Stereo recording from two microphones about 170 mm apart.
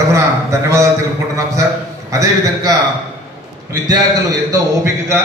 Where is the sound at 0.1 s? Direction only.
15° right (ahead or behind).